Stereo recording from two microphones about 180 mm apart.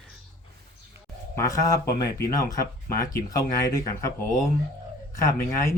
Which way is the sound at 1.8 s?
65° left (ahead or behind).